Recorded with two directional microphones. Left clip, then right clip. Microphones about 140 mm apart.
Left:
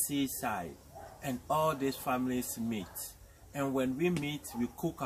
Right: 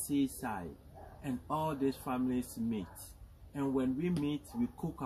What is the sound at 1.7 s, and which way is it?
Speech, 25° left (ahead or behind).